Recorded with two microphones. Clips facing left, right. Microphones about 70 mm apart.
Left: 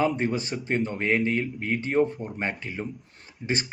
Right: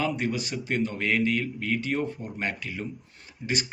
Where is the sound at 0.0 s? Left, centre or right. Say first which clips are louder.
Left 3 dB; left.